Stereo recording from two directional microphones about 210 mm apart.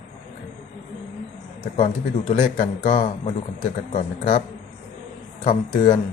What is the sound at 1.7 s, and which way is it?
Speech, 40° left (ahead or behind).